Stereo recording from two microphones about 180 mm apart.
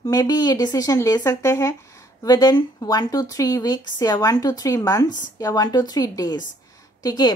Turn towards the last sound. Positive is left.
turn(degrees=25)  # may be behind; listen again after turning